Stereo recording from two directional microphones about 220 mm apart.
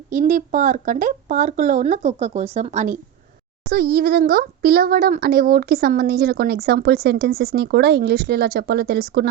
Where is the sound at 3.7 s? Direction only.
45° right (ahead or behind).